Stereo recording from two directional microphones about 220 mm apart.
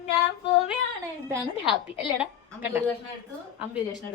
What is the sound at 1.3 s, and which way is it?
A woman's voice, 5° right (ahead or behind).